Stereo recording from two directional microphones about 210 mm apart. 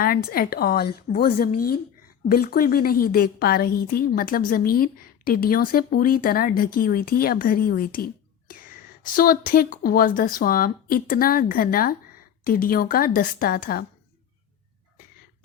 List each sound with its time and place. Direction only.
0.0 s a woman's voice: 45° left (ahead or behind)